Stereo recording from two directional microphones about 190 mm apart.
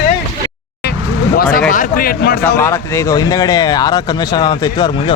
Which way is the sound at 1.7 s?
45° left (ahead or behind).